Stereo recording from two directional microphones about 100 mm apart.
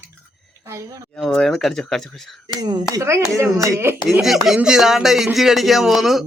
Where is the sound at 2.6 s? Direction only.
40° right (ahead or behind).